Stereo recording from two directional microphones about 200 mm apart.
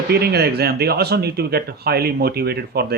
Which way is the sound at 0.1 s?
55° right (ahead or behind).